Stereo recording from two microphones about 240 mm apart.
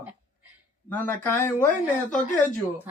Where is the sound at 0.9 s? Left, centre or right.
Centre.